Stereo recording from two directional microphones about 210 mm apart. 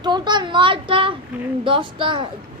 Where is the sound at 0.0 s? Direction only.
20° right (ahead or behind).